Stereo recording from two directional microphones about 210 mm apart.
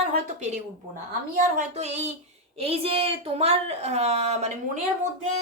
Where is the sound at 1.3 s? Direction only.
35° right (ahead or behind).